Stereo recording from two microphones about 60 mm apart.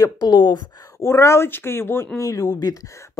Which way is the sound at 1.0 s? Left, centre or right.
Left.